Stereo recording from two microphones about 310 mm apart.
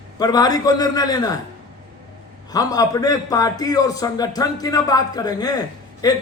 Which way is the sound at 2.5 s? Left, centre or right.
Centre.